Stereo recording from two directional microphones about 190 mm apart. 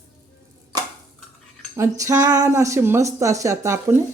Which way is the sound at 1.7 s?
15° right (ahead or behind).